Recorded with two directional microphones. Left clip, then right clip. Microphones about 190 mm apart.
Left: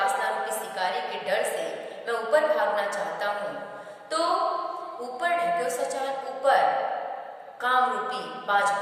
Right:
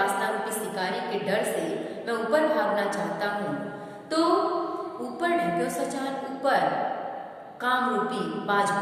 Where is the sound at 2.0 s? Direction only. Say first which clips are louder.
Left 1 dB; 5° left (ahead or behind).